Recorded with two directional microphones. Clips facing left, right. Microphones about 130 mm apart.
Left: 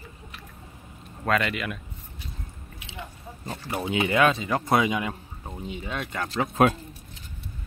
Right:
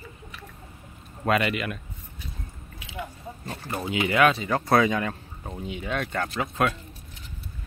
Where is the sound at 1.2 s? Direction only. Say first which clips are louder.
Right 1 dB; 5° right (ahead or behind).